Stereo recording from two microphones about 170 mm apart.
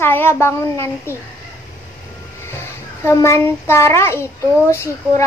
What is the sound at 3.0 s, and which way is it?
A woman's voice, 15° left (ahead or behind).